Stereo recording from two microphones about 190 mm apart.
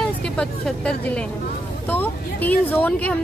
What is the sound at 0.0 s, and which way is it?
A woman's voice, 5° left (ahead or behind).